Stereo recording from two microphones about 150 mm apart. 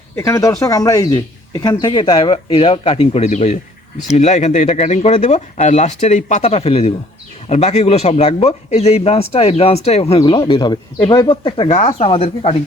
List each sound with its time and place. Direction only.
0.2 s speech: 20° left (ahead or behind)
11.7 s speech: 45° left (ahead or behind)